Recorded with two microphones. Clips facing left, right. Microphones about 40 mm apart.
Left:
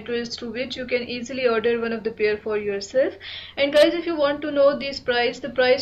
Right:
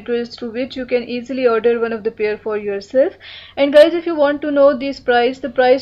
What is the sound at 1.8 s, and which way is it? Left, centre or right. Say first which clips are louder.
Speech: right 6 dB; centre.